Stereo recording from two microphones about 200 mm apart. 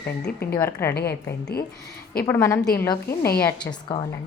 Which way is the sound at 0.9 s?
55° left (ahead or behind).